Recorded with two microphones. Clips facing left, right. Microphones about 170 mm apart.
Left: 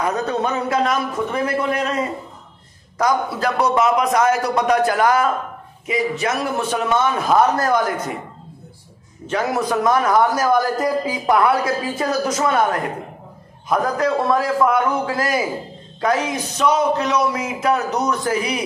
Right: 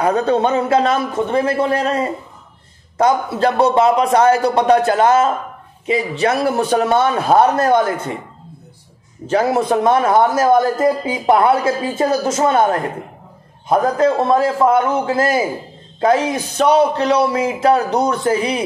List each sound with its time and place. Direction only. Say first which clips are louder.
0.0 s a man's voice: right 6 dB; 30° right (ahead or behind)
9.3 s a man's voice: right 5 dB; 30° right (ahead or behind)